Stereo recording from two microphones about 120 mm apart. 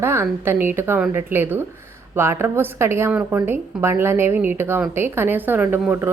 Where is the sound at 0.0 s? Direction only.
20° right (ahead or behind).